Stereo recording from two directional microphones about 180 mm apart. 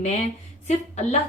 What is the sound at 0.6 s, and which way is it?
Speech, 40° left (ahead or behind).